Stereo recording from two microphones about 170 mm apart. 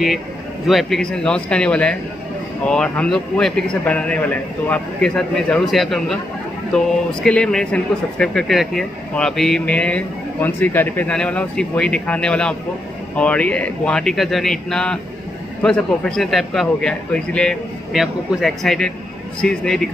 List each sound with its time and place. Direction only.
0.7 s a man's voice: centre (ahead or behind)